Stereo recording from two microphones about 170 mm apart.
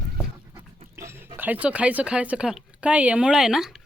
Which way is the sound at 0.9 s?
15° right (ahead or behind).